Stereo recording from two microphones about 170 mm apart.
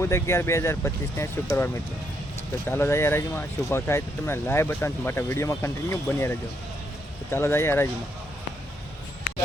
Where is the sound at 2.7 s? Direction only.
15° left (ahead or behind).